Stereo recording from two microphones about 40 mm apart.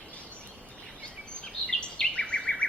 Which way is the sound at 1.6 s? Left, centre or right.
Left.